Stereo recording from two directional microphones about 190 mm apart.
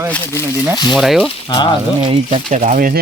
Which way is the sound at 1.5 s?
25° left (ahead or behind).